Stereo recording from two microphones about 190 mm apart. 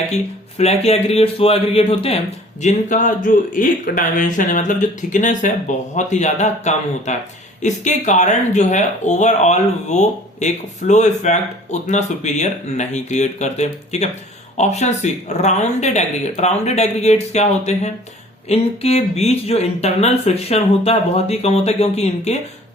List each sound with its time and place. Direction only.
0.1 s speech: 35° left (ahead or behind)
2.6 s speech: 40° left (ahead or behind)